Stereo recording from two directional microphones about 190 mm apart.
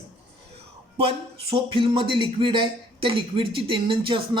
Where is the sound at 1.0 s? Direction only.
30° right (ahead or behind).